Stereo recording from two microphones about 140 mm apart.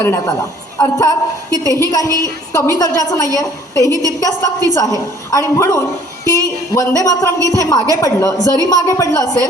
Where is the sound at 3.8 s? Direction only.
25° right (ahead or behind).